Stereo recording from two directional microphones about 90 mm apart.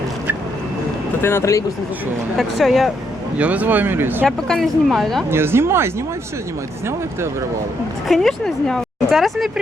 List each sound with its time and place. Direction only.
1.2 s speech: 30° left (ahead or behind)
2.4 s speech: centre (ahead or behind)
3.3 s speech: 15° right (ahead or behind)
4.3 s speech: 5° left (ahead or behind)
5.3 s speech: 25° right (ahead or behind)
8.0 s speech: centre (ahead or behind)